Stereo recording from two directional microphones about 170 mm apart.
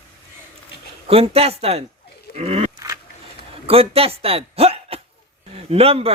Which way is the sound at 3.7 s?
35° right (ahead or behind).